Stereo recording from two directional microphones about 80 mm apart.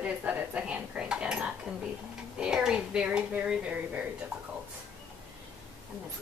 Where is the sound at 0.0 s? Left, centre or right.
Centre.